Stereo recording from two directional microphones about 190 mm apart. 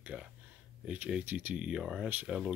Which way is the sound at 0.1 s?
5° right (ahead or behind).